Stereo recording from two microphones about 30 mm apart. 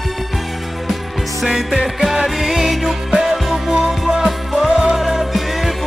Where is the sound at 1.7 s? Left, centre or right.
Centre.